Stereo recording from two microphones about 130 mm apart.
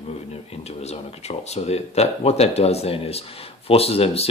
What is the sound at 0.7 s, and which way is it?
Speech, 55° left (ahead or behind).